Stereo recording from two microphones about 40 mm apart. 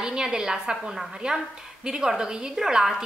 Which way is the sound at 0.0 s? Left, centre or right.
Centre.